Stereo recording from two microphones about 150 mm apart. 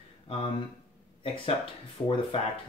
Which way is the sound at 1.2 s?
35° left (ahead or behind).